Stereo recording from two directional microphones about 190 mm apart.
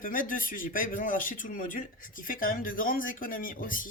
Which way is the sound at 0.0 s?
45° left (ahead or behind).